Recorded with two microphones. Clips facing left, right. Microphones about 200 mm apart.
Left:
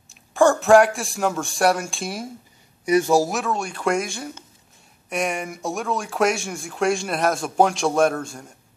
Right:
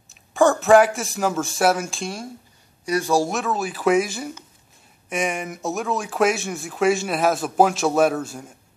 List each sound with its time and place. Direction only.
0.1 s speech: centre (ahead or behind)
2.8 s a man's voice: 20° left (ahead or behind)
3.2 s speech: centre (ahead or behind)